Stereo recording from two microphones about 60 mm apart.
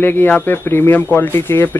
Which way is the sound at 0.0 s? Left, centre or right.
Left.